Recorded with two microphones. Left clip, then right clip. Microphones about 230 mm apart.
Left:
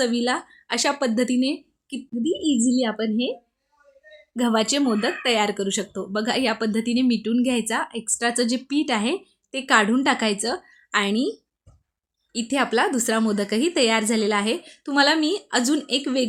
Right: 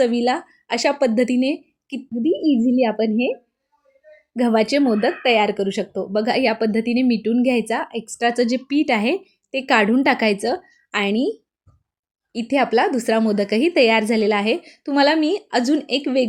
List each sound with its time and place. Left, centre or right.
0.3 s speech: centre
4.4 s speech: centre
12.5 s speech: centre